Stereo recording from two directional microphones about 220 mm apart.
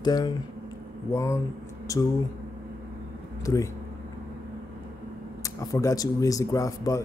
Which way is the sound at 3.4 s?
15° left (ahead or behind).